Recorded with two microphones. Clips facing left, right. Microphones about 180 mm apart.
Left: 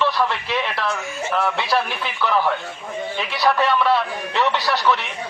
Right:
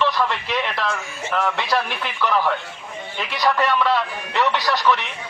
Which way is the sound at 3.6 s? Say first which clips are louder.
Left 1 dB; 15° left (ahead or behind).